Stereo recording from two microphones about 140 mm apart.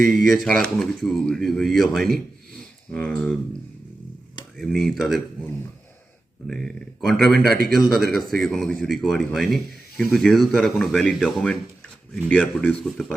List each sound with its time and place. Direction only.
0.1 s speech: centre (ahead or behind)
4.5 s speech: centre (ahead or behind)
6.5 s speech: 5° left (ahead or behind)